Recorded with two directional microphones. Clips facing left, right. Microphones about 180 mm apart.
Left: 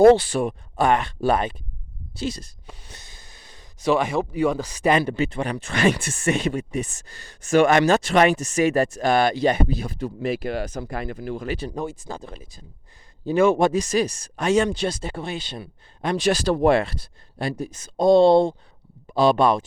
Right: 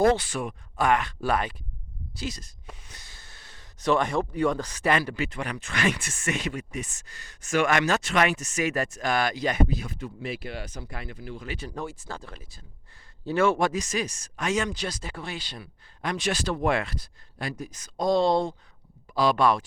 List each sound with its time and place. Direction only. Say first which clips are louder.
0.0 s speech: left 9 dB; 30° left (ahead or behind)
10.2 s speech: left 10 dB; 45° left (ahead or behind)
11.7 s speech: left 5 dB; 15° left (ahead or behind)